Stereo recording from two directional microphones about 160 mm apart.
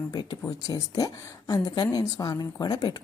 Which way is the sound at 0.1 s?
25° left (ahead or behind).